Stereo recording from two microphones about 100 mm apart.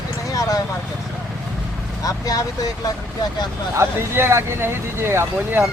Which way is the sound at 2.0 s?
35° left (ahead or behind).